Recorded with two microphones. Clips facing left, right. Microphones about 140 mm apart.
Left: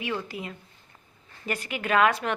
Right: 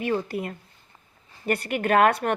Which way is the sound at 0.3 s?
55° right (ahead or behind).